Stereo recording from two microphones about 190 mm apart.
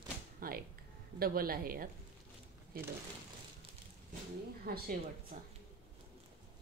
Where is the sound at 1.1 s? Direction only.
50° right (ahead or behind).